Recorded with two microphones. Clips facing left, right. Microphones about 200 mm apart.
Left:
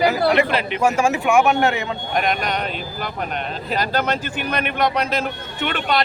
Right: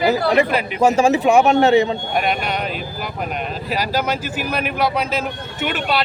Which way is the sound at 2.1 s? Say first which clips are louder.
Left 1 dB; 5° right (ahead or behind).